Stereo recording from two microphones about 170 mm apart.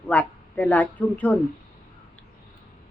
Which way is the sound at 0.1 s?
10° left (ahead or behind).